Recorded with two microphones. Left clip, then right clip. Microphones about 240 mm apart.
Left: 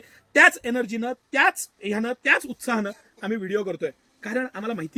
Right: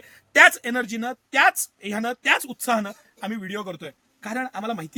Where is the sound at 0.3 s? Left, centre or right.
Right.